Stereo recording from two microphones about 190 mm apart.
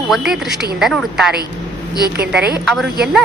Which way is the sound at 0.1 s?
Centre (ahead or behind).